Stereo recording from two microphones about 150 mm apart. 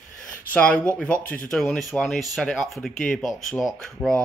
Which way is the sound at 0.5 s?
10° left (ahead or behind).